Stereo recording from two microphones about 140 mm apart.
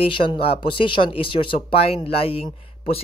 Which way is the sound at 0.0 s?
35° left (ahead or behind).